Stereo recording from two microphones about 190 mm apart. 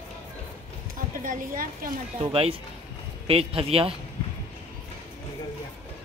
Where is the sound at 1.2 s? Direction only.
45° right (ahead or behind).